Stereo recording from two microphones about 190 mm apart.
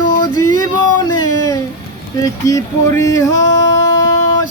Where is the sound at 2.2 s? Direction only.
20° left (ahead or behind).